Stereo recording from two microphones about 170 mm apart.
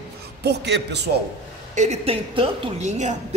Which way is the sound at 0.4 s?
80° right.